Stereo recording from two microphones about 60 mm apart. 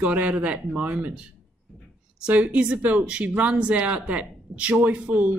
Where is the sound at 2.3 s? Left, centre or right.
Right.